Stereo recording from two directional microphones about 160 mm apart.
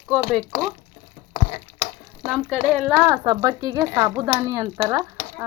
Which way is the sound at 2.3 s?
Centre (ahead or behind).